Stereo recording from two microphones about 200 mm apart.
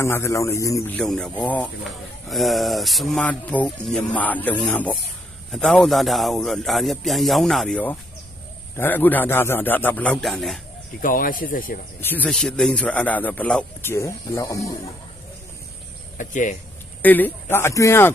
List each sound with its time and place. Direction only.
0.0 s speech: 10° left (ahead or behind)
11.0 s speech: 45° left (ahead or behind)
11.9 s speech: 10° left (ahead or behind)
16.1 s speech: 40° left (ahead or behind)
17.0 s speech: 10° left (ahead or behind)